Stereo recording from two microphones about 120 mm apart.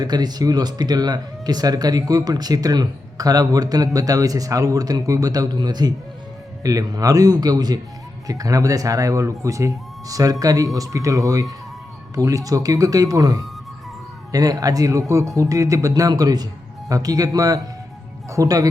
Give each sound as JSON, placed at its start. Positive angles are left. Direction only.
{"t": 0.0, "sound": "speech", "side_deg": -35}